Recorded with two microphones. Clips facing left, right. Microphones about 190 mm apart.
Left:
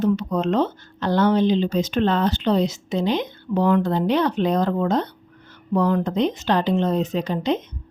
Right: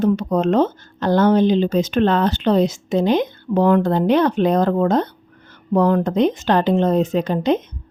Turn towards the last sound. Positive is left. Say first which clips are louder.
# right 4 dB
turn(degrees=-50)  # may be behind; listen again after turning